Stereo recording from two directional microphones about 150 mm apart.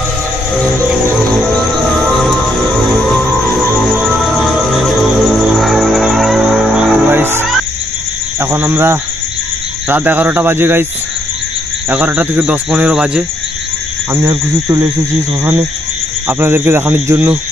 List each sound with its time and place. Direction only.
3.9 s music: 5° right (ahead or behind)
8.4 s speech: 15° right (ahead or behind)
11.9 s speech: 10° right (ahead or behind)
14.1 s speech: 20° right (ahead or behind)
16.3 s speech: 15° right (ahead or behind)